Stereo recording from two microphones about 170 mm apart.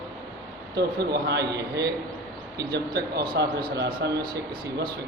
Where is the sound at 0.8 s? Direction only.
70° right (ahead or behind).